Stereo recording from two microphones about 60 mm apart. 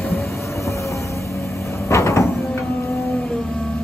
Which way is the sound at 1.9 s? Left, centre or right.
Left.